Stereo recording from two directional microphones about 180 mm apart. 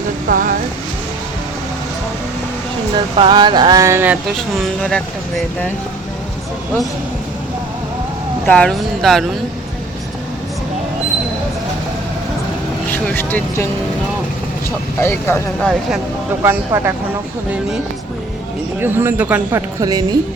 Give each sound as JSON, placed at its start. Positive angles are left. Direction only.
{"t": 0.3, "sound": "speech", "side_deg": -50}
{"t": 2.9, "sound": "speech", "side_deg": -25}
{"t": 4.4, "sound": "speech", "side_deg": 5}
{"t": 8.4, "sound": "speech", "side_deg": 5}
{"t": 12.9, "sound": "speech", "side_deg": 10}
{"t": 15.0, "sound": "speech", "side_deg": 10}
{"t": 16.4, "sound": "speech", "side_deg": -15}
{"t": 18.8, "sound": "speech", "side_deg": -10}